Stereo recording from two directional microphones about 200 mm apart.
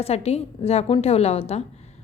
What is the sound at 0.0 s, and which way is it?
A woman's voice, 30° left (ahead or behind).